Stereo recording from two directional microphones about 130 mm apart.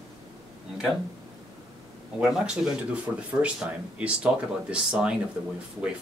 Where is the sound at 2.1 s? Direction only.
5° right (ahead or behind).